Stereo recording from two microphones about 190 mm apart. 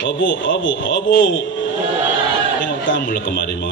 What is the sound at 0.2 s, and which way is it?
Speech, 80° left.